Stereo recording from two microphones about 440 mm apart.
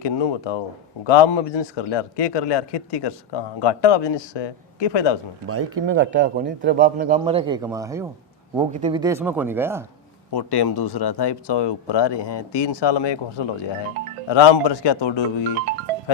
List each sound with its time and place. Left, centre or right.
0.0 s a man's voice: left
5.5 s speech: right; by 9.8 s centre
10.3 s a man's voice: left